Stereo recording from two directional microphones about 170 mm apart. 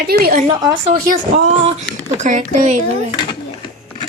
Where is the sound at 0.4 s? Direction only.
30° right (ahead or behind).